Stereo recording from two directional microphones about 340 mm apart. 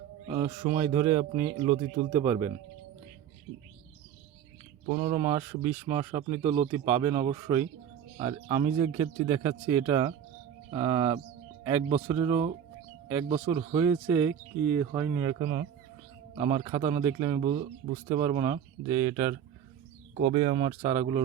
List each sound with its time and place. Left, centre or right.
0.3 s a man's voice: centre
4.9 s a man's voice: centre
13.7 s a man's voice: centre